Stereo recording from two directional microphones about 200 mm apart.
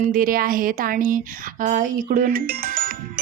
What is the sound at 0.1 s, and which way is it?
A woman's voice, 45° right (ahead or behind).